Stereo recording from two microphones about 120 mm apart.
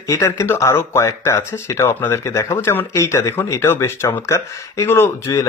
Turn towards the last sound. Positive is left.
turn(degrees=25)  # may be behind; listen again after turning